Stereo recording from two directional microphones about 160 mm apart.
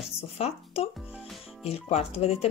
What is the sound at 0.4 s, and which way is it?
Speech, 40° left (ahead or behind).